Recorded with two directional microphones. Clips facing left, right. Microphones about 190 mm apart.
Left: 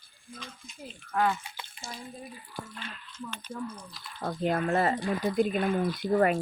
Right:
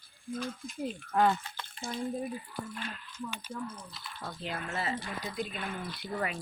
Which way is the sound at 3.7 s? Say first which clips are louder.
Left 1 dB; centre (ahead or behind).